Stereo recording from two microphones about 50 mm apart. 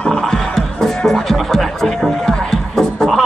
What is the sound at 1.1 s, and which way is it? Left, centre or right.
Music, centre.